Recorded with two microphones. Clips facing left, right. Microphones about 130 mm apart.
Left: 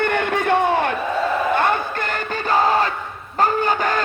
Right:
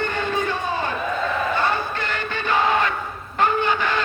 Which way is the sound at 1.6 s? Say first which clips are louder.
Left 3 dB; 50° left (ahead or behind).